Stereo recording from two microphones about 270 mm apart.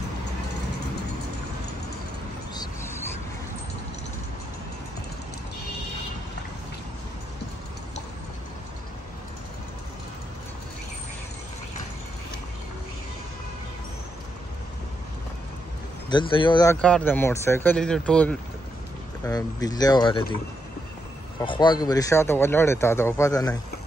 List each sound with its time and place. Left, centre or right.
2.5 s a sound: centre
16.1 s speech: centre
16.7 s speech: centre
21.4 s speech: centre